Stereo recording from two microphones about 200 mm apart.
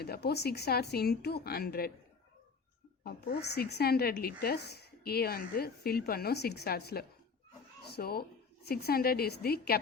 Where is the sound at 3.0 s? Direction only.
55° left (ahead or behind).